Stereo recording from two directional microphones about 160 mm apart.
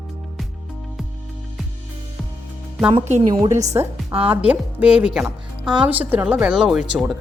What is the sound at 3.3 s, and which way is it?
Speech, 20° right (ahead or behind).